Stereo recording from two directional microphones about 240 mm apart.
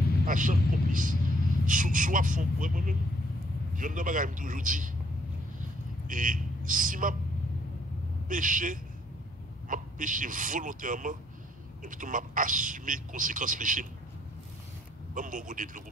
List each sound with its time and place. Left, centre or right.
0.3 s a man's voice: right
6.0 s speech: right
8.3 s a man's voice: right
15.1 s a man's voice: right